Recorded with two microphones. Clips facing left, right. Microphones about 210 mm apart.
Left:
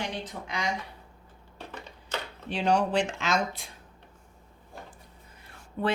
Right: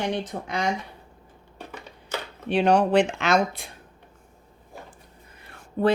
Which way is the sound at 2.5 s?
60° right (ahead or behind).